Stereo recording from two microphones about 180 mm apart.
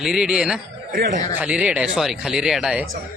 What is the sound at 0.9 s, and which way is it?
Speech, 50° right (ahead or behind).